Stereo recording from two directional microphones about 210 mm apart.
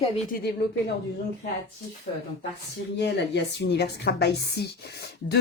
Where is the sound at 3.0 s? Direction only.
55° left (ahead or behind).